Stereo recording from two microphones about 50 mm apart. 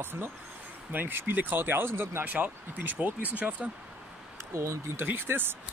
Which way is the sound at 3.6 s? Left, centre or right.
Centre.